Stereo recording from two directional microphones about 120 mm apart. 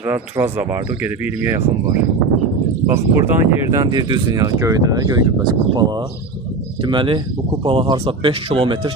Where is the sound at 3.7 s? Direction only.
35° right (ahead or behind).